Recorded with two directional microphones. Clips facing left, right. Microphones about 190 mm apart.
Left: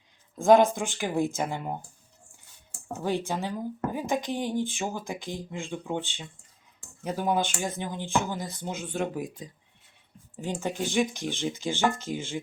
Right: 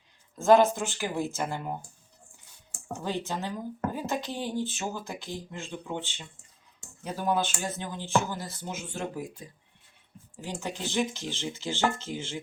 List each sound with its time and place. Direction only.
0.3 s speech: 15° left (ahead or behind)
3.0 s speech: 10° left (ahead or behind)